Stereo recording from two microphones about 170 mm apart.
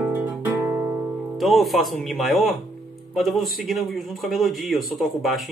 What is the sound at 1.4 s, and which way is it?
A man's voice, centre (ahead or behind).